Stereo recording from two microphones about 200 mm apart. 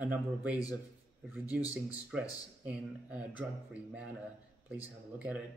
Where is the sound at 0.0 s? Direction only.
5° right (ahead or behind).